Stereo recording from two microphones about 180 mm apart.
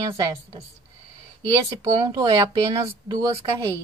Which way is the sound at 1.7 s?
20° right (ahead or behind).